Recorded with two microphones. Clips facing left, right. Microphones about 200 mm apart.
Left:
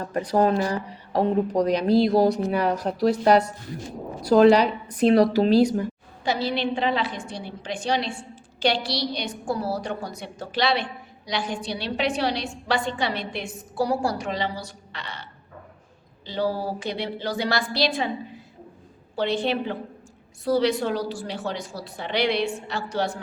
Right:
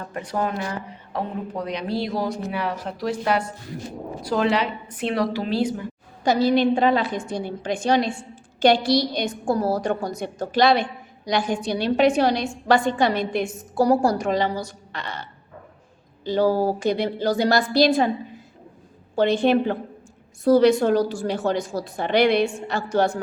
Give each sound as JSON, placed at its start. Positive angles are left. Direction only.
{"t": 0.1, "sound": "a woman's voice", "side_deg": 35}
{"t": 6.2, "sound": "a woman's voice", "side_deg": -45}
{"t": 19.1, "sound": "a woman's voice", "side_deg": -50}